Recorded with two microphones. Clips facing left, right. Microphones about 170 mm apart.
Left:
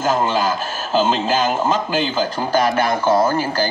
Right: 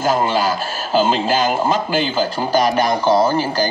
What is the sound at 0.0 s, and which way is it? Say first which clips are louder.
A man's voice: right 1 dB; 10° right (ahead or behind).